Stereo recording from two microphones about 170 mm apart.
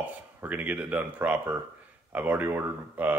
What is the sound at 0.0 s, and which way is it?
Speech, 10° right (ahead or behind).